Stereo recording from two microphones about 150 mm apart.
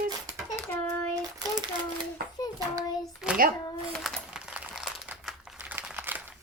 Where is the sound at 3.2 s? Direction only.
5° right (ahead or behind).